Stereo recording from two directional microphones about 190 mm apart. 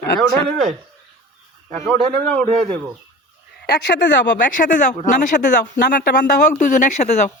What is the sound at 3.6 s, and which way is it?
Speech, 60° left (ahead or behind).